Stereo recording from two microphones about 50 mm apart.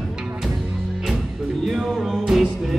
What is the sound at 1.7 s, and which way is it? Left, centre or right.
Music, centre.